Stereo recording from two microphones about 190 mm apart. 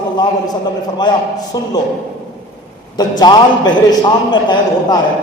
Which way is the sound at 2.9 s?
20° left (ahead or behind).